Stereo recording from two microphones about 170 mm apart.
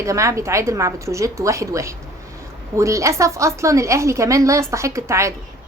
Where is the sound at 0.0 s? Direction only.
20° right (ahead or behind).